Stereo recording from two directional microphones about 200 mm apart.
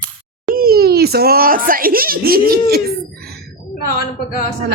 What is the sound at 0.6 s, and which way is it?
A child's voice, 50° right (ahead or behind).